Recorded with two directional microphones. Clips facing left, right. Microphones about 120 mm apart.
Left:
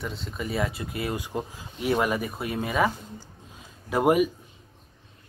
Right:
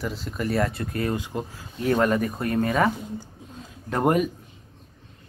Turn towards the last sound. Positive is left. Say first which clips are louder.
# left 1 dB
turn(degrees=5)  # may be behind; listen again after turning